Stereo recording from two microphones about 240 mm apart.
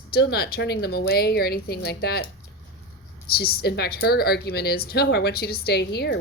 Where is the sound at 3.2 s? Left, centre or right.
Left.